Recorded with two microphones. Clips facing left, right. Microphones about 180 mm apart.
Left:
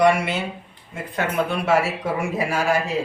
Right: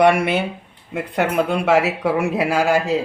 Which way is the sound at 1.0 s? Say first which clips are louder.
Right 4 dB; 70° right (ahead or behind).